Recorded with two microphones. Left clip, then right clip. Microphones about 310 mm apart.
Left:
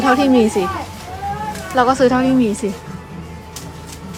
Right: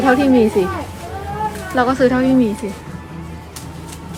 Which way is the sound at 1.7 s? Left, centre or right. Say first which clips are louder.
Left 2 dB; centre.